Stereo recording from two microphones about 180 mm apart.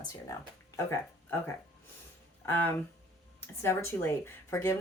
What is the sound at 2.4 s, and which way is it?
Speech, 10° left (ahead or behind).